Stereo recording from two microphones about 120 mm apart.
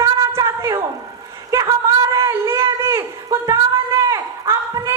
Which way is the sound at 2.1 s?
25° right (ahead or behind).